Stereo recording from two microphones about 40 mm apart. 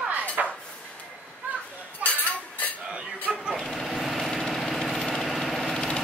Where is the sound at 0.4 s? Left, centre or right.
Right.